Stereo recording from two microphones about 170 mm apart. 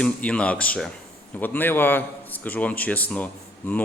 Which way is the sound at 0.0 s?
5° left (ahead or behind).